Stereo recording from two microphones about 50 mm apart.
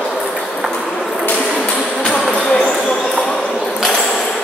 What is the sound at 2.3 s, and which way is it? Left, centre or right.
Basketball bounce, centre.